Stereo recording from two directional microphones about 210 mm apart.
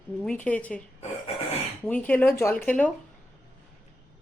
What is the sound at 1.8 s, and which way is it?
Speech, 5° left (ahead or behind).